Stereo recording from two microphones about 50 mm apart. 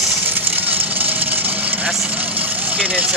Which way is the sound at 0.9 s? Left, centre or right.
Right.